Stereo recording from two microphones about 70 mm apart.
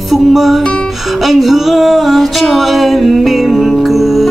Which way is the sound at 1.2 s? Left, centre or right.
Centre.